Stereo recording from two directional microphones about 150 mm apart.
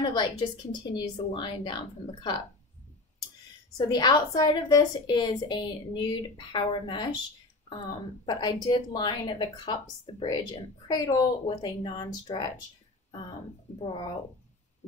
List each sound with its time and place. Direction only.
0.0 s speech: 30° left (ahead or behind)
3.7 s speech: 25° left (ahead or behind)
8.3 s speech: 30° left (ahead or behind)